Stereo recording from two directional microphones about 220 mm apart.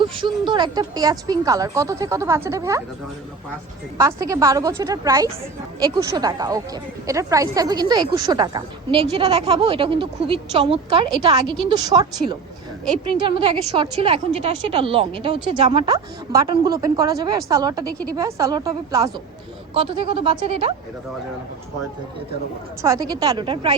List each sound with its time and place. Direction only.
0.0 s a woman's voice: 20° right (ahead or behind)
3.9 s a woman's voice: 15° right (ahead or behind)
22.8 s a woman's voice: 15° right (ahead or behind)